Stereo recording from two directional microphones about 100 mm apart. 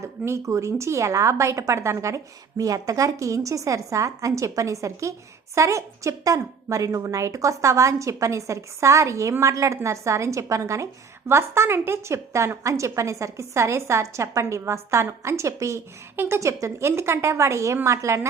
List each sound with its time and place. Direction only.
0.0 s a woman's voice: 30° right (ahead or behind)